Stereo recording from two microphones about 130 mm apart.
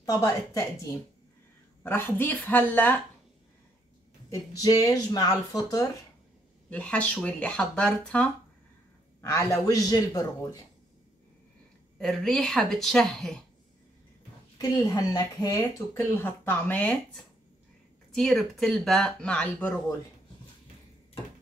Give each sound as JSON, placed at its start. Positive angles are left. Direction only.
{"t": 0.0, "sound": "a woman's voice", "side_deg": 25}
{"t": 4.3, "sound": "speech", "side_deg": 30}
{"t": 6.7, "sound": "speech", "side_deg": 10}
{"t": 9.2, "sound": "speech", "side_deg": 20}
{"t": 12.0, "sound": "speech", "side_deg": 5}
{"t": 14.6, "sound": "speech", "side_deg": 25}